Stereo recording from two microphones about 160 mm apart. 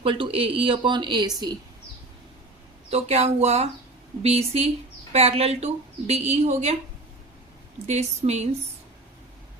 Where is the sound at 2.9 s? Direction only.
40° right (ahead or behind).